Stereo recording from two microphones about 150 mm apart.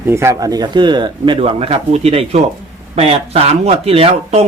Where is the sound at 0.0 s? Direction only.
15° right (ahead or behind).